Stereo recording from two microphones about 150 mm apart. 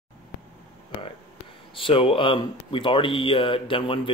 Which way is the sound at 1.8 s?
35° left (ahead or behind).